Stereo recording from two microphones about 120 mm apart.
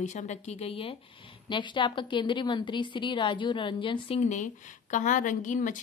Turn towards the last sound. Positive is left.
turn(degrees=90)